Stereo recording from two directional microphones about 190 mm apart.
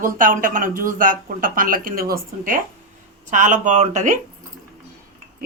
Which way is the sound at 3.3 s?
40° right (ahead or behind).